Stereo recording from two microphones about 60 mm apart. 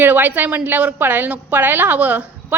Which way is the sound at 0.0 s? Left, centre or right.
Right.